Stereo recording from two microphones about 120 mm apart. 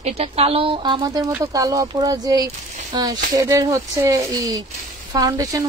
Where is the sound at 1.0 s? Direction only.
30° right (ahead or behind).